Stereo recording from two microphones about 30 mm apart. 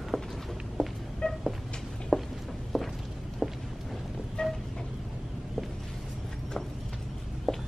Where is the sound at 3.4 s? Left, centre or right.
Centre.